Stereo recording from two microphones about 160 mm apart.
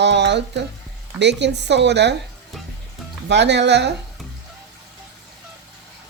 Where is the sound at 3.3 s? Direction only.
90° right.